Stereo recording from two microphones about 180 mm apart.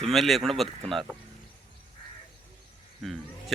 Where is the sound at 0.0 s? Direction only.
Centre (ahead or behind).